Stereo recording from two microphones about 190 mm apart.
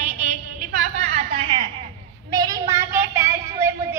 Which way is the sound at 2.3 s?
20° right (ahead or behind).